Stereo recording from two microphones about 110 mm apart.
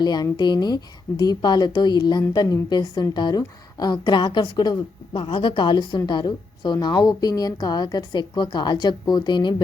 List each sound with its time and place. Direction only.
0.0 s a woman's voice: 40° left (ahead or behind)